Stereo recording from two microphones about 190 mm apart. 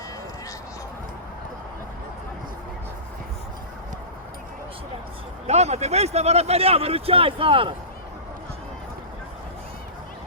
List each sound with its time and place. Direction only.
5.5 s speech: 35° right (ahead or behind)